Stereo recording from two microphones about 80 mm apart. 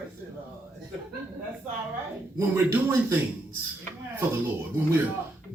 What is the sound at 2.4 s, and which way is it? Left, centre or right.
Speech, right.